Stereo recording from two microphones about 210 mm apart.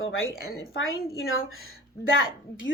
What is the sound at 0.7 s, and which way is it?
Speech, 75° left (ahead or behind).